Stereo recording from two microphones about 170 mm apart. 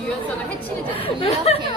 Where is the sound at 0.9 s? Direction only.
35° left (ahead or behind).